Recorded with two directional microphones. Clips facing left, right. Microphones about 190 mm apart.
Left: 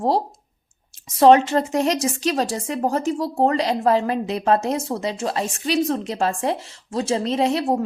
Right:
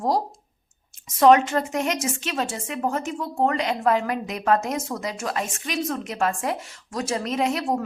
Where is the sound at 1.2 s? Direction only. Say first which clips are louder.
Left 3 dB; 30° left (ahead or behind).